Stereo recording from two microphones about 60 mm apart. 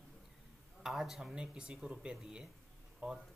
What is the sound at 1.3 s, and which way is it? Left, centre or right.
Speech, centre.